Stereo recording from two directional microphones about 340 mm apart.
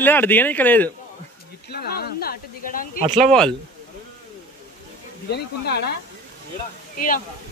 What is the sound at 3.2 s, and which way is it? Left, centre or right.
Speech, centre.